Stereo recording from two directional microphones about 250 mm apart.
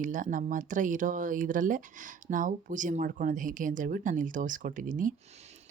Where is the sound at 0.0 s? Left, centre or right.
Right.